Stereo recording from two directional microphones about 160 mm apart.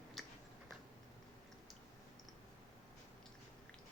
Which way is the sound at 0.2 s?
Centre (ahead or behind).